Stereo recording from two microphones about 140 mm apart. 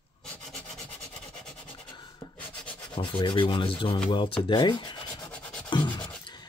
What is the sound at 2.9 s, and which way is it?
Rub, 35° left (ahead or behind).